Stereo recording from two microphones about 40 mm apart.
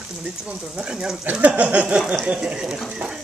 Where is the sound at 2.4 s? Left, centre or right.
Centre.